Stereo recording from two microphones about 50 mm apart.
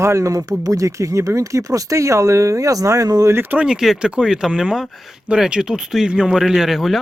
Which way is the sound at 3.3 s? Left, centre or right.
Right.